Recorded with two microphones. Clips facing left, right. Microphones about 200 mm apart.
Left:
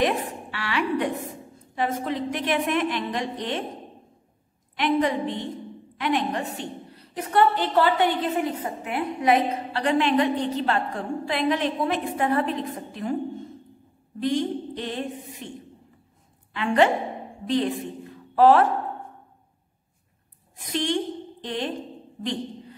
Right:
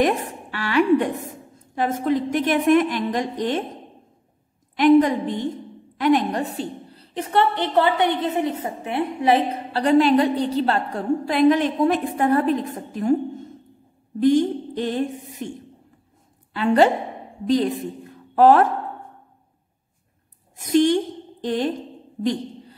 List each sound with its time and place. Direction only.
0.0 s a woman's voice: 45° right (ahead or behind)
4.7 s a woman's voice: 45° right (ahead or behind)
14.2 s a woman's voice: 45° right (ahead or behind)
16.5 s a woman's voice: 35° right (ahead or behind)
20.5 s a woman's voice: 45° right (ahead or behind)
22.2 s a sound: 40° right (ahead or behind)